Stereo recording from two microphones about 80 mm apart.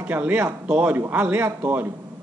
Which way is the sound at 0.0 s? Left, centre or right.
Right.